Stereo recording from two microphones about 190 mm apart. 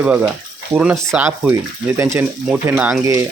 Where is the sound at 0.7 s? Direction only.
5° right (ahead or behind).